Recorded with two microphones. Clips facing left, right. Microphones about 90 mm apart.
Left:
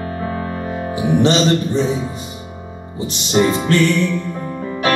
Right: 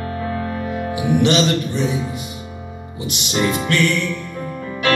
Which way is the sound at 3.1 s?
30° left (ahead or behind).